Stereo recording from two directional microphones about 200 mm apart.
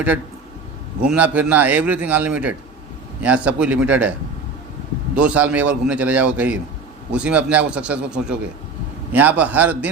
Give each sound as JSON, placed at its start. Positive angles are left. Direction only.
{"t": 1.1, "sound": "a man's voice", "side_deg": -5}
{"t": 5.1, "sound": "a man's voice", "side_deg": -5}